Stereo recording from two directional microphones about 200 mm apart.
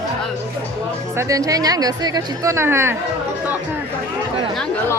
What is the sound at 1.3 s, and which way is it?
A woman's voice, 15° right (ahead or behind).